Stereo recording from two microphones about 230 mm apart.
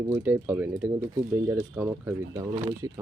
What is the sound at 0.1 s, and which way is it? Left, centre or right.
Speech, centre.